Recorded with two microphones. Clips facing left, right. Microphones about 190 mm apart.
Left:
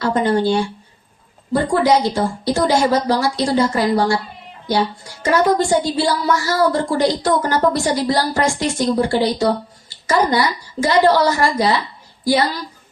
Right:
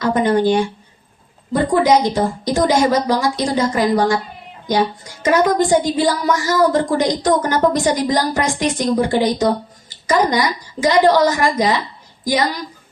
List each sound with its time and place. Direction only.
0.0 s a woman's voice: 20° right (ahead or behind)
1.7 s a woman's voice: 20° right (ahead or behind)
9.9 s a sound: 20° right (ahead or behind)
10.2 s a woman's voice: 20° right (ahead or behind)